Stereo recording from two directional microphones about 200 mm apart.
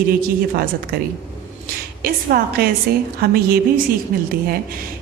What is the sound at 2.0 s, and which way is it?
A woman's voice, 45° right (ahead or behind).